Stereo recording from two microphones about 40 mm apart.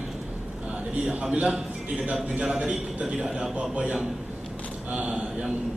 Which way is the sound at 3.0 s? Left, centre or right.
Centre.